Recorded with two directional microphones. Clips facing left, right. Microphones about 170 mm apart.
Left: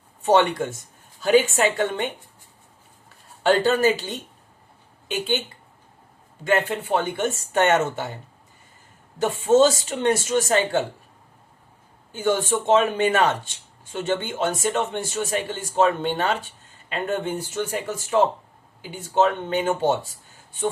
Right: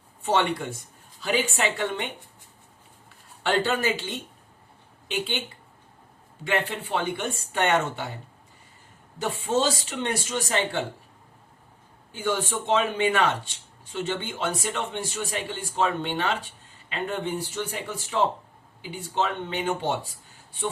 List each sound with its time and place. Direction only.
1.5 s speech: 45° left (ahead or behind)
3.4 s speech: 40° left (ahead or behind)
6.4 s speech: 45° left (ahead or behind)
9.5 s speech: 45° left (ahead or behind)
12.1 s speech: 45° left (ahead or behind)